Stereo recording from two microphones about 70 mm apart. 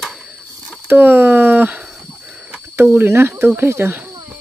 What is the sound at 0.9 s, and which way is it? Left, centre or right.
Speech, right.